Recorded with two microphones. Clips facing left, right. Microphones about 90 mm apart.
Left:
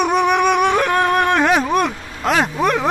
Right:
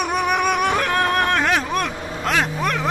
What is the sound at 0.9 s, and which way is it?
Vehicle, 15° left (ahead or behind).